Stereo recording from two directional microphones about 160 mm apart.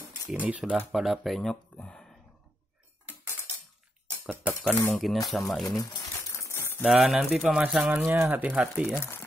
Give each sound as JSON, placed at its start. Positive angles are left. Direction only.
{"t": 0.3, "sound": "speech", "side_deg": -5}
{"t": 4.6, "sound": "speech", "side_deg": 5}
{"t": 5.8, "sound": "crumpling", "side_deg": 20}
{"t": 6.8, "sound": "speech", "side_deg": 0}